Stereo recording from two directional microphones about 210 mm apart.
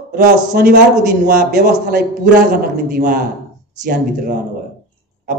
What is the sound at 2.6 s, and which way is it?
Speech, 45° right (ahead or behind).